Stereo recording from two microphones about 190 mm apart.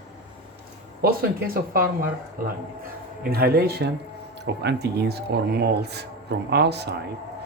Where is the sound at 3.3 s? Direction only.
55° right (ahead or behind).